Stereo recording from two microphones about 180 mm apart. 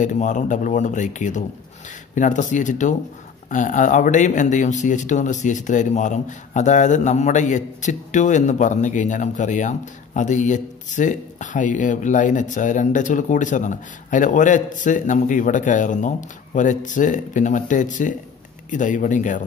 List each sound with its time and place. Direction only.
0.0 s speech: 45° left (ahead or behind)